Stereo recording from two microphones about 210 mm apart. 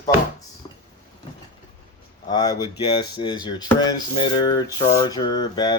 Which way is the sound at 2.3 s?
20° left (ahead or behind).